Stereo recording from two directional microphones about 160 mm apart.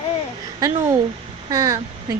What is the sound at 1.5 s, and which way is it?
Speech, 20° right (ahead or behind).